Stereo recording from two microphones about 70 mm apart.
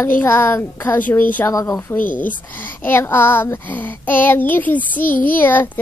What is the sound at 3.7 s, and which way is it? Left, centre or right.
Child singing, left.